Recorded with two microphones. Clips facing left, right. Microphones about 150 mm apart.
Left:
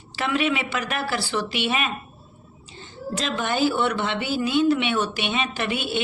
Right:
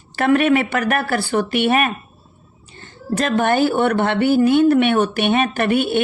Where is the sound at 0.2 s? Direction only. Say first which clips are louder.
Right 9 dB; 55° right (ahead or behind).